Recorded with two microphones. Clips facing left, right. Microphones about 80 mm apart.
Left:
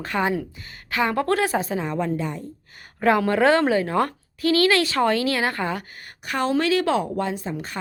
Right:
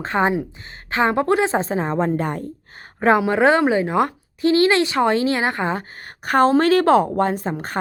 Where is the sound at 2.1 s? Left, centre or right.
Right.